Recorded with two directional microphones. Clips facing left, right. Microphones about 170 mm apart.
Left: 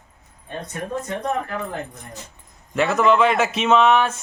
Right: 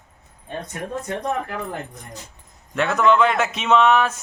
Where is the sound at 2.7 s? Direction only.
Centre (ahead or behind).